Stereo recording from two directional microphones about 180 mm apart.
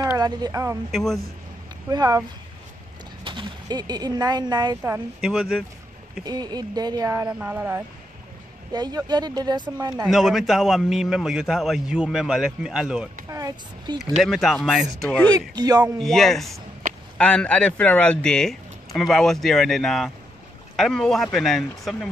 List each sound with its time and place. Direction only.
0.0 s speech: 20° right (ahead or behind)
0.9 s a man's voice: centre (ahead or behind)
1.9 s speech: 20° right (ahead or behind)
3.3 s speech: 25° right (ahead or behind)
4.9 s a man's voice: 5° right (ahead or behind)
6.2 s speech: 20° right (ahead or behind)
8.7 s speech: 20° right (ahead or behind)
10.0 s a man's voice: centre (ahead or behind)
13.3 s speech: 20° right (ahead or behind)
14.2 s a man's voice: centre (ahead or behind)
15.2 s speech: 20° right (ahead or behind)
16.0 s a man's voice: centre (ahead or behind)